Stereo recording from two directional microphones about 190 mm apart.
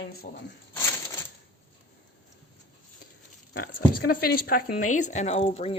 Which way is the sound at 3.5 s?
50° left (ahead or behind).